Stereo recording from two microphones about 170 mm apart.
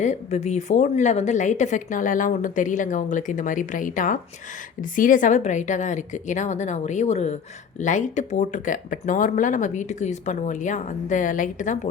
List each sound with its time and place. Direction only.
0.0 s a woman's voice: 40° left (ahead or behind)